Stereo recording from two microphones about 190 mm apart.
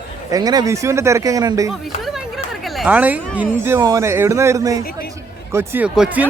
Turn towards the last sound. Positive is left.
turn(degrees=-5)  # may be behind; listen again after turning